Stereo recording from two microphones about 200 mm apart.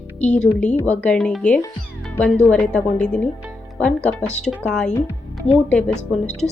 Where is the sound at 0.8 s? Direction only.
5° left (ahead or behind).